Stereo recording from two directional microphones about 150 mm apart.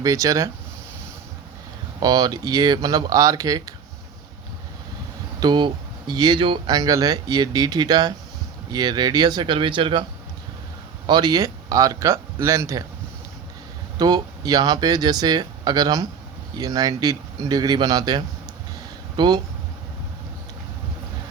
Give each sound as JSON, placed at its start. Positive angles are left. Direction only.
{"t": 0.0, "sound": "speech", "side_deg": -20}
{"t": 2.0, "sound": "speech", "side_deg": -30}
{"t": 5.4, "sound": "speech", "side_deg": -30}
{"t": 11.0, "sound": "a man's voice", "side_deg": -30}
{"t": 14.0, "sound": "speech", "side_deg": -25}